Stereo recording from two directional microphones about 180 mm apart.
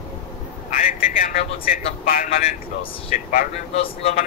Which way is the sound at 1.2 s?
50° left (ahead or behind).